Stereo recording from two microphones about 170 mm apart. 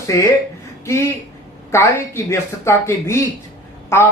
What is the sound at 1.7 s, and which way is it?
Speech, 15° left (ahead or behind).